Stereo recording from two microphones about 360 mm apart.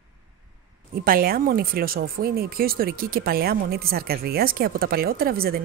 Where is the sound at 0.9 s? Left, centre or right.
Right.